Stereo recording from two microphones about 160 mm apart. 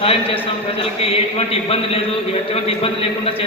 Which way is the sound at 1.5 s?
35° left (ahead or behind).